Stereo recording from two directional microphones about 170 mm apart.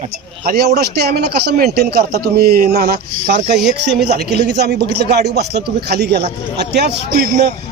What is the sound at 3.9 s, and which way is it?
A man's voice, 75° right (ahead or behind).